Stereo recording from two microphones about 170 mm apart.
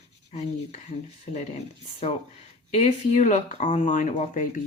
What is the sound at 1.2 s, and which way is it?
Speech, 40° left (ahead or behind).